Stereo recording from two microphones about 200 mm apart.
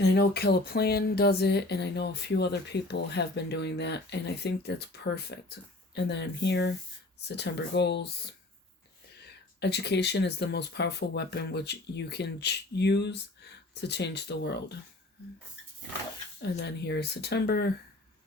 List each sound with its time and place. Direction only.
0.0 s speech: 55° left (ahead or behind)
9.6 s speech: 55° left (ahead or behind)
16.4 s speech: 55° left (ahead or behind)